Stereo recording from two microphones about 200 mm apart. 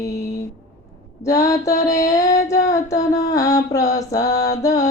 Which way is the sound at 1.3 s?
15° left (ahead or behind).